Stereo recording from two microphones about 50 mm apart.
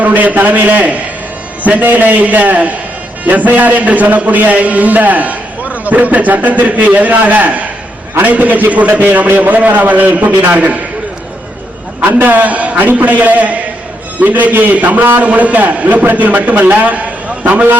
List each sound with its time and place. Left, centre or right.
0.0 s a man's voice: right
11.9 s a man's voice: right